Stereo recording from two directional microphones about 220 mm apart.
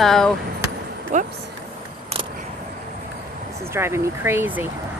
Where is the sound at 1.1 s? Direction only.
35° right (ahead or behind).